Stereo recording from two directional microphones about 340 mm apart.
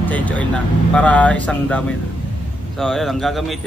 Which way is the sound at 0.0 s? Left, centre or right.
Centre.